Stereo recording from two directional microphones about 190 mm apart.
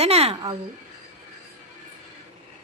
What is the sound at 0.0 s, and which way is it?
Speech, 35° right (ahead or behind).